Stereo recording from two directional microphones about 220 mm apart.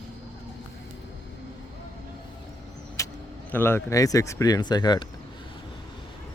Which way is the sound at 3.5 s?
10° left (ahead or behind).